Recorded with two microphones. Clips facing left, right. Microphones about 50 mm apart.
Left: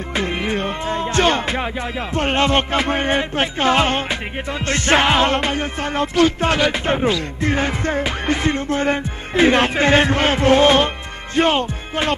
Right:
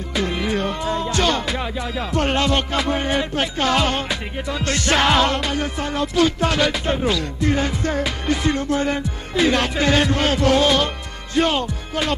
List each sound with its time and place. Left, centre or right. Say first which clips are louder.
0.1 s music: even; left